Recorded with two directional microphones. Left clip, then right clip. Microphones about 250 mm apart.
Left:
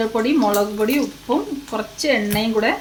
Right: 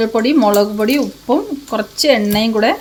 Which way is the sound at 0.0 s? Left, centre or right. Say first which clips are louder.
Right 5 dB; right.